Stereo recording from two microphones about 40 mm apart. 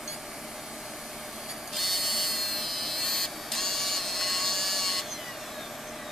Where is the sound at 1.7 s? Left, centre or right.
Centre.